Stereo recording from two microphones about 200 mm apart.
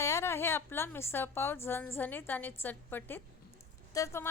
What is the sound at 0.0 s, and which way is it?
A woman's voice, 15° left (ahead or behind).